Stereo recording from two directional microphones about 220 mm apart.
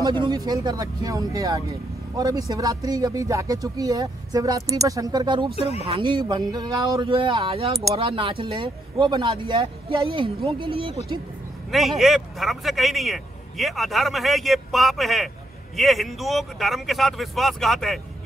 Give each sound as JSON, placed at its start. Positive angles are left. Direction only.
{"t": 0.0, "sound": "speech", "side_deg": -20}
{"t": 5.6, "sound": "speech", "side_deg": 30}
{"t": 5.9, "sound": "speech", "side_deg": -20}
{"t": 11.7, "sound": "a man's voice", "side_deg": 0}